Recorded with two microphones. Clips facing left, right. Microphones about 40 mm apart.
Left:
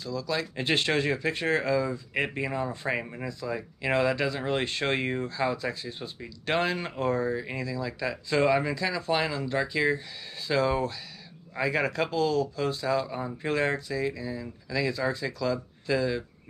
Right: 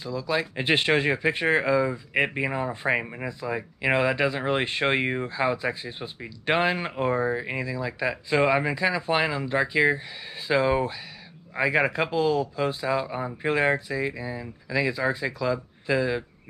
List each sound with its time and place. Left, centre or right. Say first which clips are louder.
0.0 s speech: right 3 dB; right